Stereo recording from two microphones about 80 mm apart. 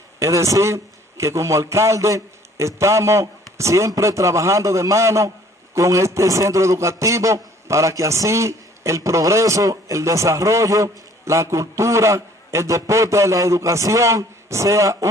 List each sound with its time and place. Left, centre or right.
0.2 s a man's voice: right